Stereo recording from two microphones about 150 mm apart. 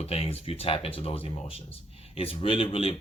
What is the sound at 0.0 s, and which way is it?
Speech, 40° left (ahead or behind).